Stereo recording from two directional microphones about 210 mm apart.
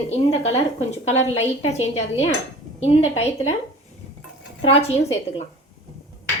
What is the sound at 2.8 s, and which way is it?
Speech, 30° left (ahead or behind).